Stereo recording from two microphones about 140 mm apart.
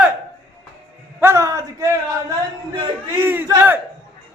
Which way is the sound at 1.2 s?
20° right (ahead or behind).